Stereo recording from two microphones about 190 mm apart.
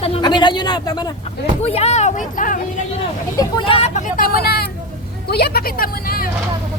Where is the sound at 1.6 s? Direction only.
35° left (ahead or behind).